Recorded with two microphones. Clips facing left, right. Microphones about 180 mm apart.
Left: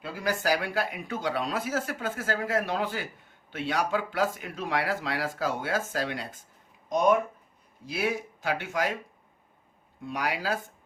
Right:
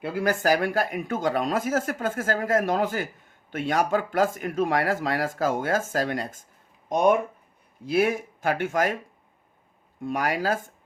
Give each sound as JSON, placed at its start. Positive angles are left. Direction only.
{"t": 0.0, "sound": "speech", "side_deg": -55}
{"t": 6.8, "sound": "speech", "side_deg": -55}
{"t": 10.0, "sound": "speech", "side_deg": -50}